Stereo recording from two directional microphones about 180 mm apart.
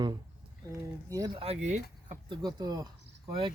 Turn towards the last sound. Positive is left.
turn(degrees=-25)  # may be behind; listen again after turning